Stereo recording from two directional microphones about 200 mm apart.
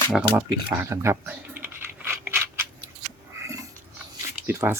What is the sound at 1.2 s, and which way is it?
Typing, 10° right (ahead or behind).